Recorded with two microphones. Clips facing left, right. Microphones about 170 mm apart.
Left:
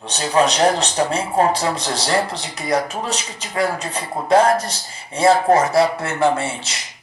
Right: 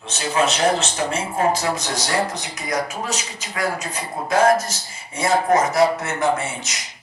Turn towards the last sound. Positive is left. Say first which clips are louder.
# left 1 dB
turn(degrees=30)  # may be behind; listen again after turning